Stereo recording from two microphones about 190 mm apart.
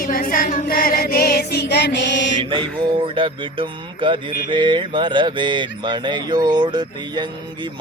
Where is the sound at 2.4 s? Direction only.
25° right (ahead or behind).